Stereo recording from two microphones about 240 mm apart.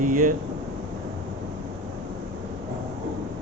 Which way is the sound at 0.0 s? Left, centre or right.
Right.